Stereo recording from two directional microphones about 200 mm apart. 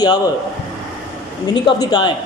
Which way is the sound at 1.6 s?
20° left (ahead or behind).